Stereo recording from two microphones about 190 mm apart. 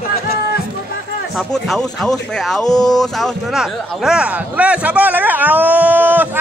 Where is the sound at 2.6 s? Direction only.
20° left (ahead or behind).